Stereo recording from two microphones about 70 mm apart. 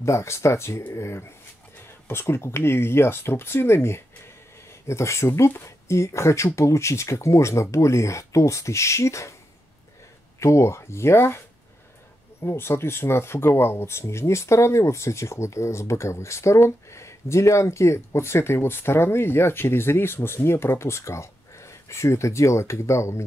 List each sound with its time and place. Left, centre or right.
0.0 s speech: left
10.4 s speech: left